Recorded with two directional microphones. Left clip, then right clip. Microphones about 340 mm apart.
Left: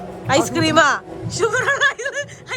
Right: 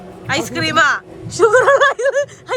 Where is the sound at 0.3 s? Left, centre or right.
Centre.